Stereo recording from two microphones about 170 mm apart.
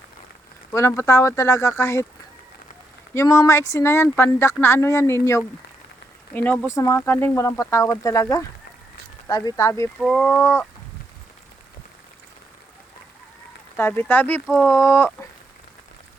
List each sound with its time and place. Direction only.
0.7 s speech: 15° left (ahead or behind)
3.2 s speech: 20° left (ahead or behind)
10.0 s speech: centre (ahead or behind)
13.7 s speech: 10° left (ahead or behind)